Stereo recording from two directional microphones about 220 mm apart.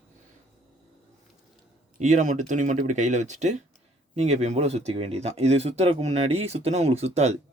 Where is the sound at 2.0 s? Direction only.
35° right (ahead or behind).